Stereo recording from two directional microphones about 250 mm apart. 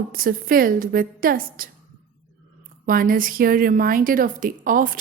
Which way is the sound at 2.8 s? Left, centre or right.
Right.